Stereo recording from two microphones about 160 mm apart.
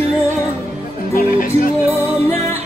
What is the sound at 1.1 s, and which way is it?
Music, 60° left (ahead or behind).